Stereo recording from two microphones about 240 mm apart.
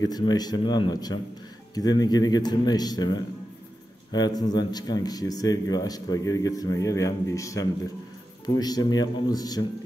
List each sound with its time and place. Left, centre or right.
0.0 s speech: centre